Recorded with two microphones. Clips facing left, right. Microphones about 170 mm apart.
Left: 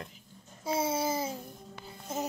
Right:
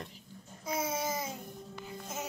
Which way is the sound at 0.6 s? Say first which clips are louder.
Left 4 dB; 30° left (ahead or behind).